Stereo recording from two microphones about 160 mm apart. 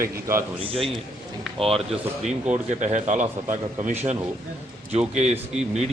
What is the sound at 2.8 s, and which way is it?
A man's voice, 50° right (ahead or behind).